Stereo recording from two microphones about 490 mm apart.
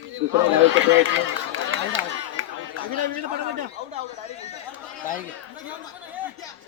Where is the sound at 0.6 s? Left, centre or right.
Right.